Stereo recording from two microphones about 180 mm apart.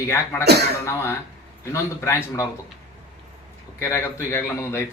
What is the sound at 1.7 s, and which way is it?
Speech, 15° left (ahead or behind).